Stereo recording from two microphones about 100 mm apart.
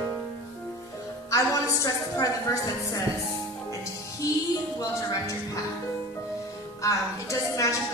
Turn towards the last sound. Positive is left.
turn(degrees=30)  # may be behind; listen again after turning